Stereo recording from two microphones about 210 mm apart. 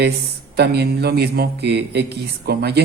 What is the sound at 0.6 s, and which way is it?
Speech, 50° right (ahead or behind).